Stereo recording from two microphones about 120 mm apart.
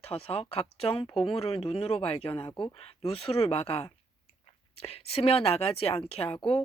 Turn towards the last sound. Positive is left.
turn(degrees=45)  # may be behind; listen again after turning